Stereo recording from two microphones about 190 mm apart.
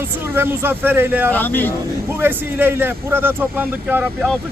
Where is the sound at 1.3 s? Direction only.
10° left (ahead or behind).